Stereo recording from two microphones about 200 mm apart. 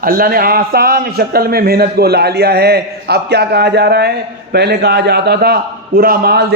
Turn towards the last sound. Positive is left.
turn(degrees=-50)  # may be behind; listen again after turning